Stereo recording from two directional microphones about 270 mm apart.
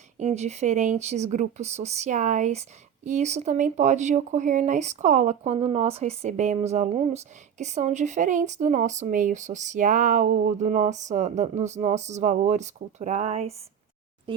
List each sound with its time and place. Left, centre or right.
0.2 s speech: right